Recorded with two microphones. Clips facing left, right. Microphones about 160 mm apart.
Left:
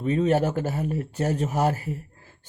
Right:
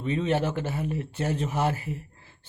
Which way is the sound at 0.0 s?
40° left (ahead or behind).